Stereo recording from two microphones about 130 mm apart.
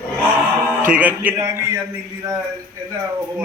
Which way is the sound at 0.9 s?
10° right (ahead or behind).